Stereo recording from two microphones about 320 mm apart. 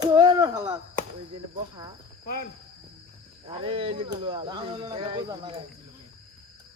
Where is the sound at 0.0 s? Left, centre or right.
Centre.